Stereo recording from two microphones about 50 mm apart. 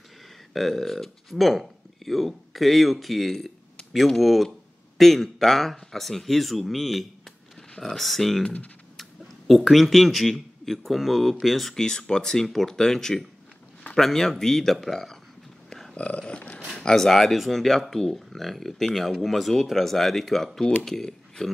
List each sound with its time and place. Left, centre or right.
0.5 s speech: centre
9.5 s speech: centre
11.8 s speech: centre
15.7 s dog: centre
16.0 s dog: left
16.7 s speech: centre